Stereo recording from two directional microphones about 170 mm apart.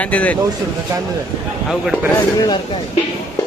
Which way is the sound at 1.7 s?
Centre (ahead or behind).